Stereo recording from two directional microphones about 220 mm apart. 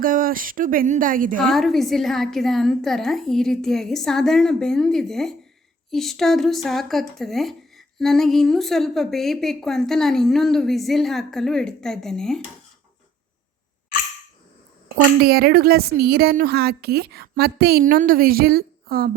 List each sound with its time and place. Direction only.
0.0 s speech: 40° right (ahead or behind)
1.5 s speech: centre (ahead or behind)
15.2 s a woman's voice: 45° right (ahead or behind)